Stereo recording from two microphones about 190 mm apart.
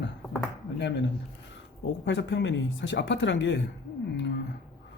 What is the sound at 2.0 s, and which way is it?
Speech, 70° left (ahead or behind).